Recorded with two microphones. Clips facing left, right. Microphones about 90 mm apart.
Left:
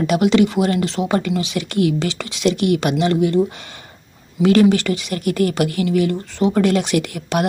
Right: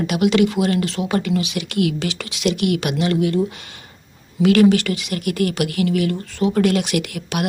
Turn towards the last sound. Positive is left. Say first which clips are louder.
# left 3 dB
turn(degrees=35)  # may be behind; listen again after turning